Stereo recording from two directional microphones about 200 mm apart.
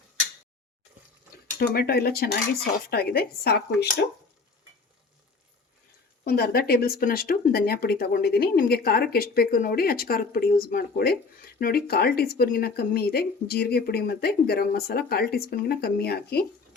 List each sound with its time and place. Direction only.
1.5 s speech: 50° left (ahead or behind)
6.2 s speech: 50° left (ahead or behind)